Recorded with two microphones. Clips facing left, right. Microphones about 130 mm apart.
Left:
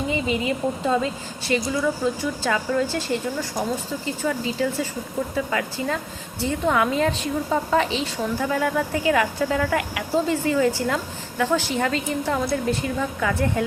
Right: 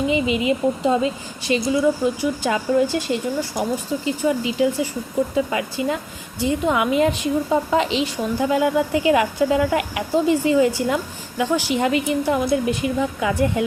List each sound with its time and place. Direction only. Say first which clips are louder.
0.1 s a woman's voice: right 4 dB; 20° right (ahead or behind)